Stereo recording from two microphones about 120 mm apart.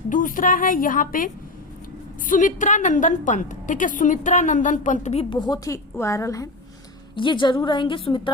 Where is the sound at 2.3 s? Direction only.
90° left; by 5.3 s 70° left (ahead or behind).